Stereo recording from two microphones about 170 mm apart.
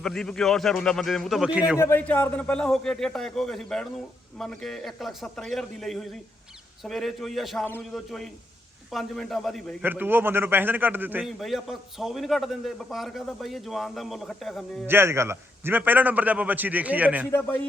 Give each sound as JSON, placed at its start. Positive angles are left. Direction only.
{"t": 0.0, "sound": "a man's voice", "side_deg": 5}
{"t": 1.8, "sound": "a man's voice", "side_deg": 10}
{"t": 9.8, "sound": "a man's voice", "side_deg": -10}
{"t": 11.3, "sound": "a man's voice", "side_deg": 0}
{"t": 14.8, "sound": "a man's voice", "side_deg": -15}